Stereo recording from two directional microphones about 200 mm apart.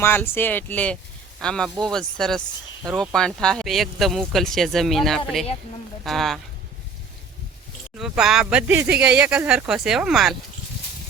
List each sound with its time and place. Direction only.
0.0 s speech: 10° left (ahead or behind)
7.9 s speech: 5° right (ahead or behind)